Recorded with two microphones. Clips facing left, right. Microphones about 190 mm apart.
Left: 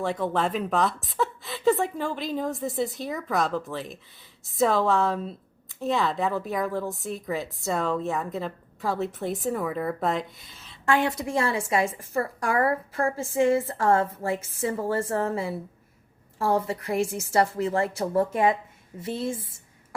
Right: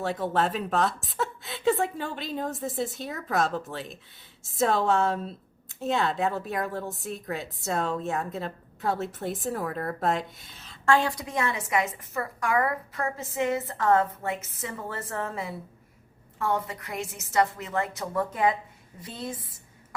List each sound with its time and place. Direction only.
0.1 s a woman's voice: centre (ahead or behind)
10.8 s a woman's voice: 20° left (ahead or behind)